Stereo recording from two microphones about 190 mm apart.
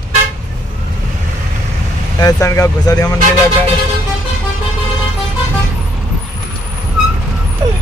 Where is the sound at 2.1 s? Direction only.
20° left (ahead or behind).